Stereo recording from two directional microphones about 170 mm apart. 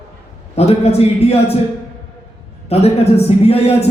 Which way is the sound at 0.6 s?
35° left (ahead or behind).